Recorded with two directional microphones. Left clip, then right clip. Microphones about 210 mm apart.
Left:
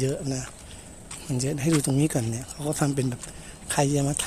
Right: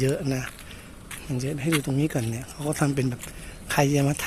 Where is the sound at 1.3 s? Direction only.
10° left (ahead or behind).